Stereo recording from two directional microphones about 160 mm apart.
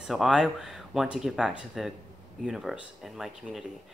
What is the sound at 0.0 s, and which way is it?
Speech, centre (ahead or behind).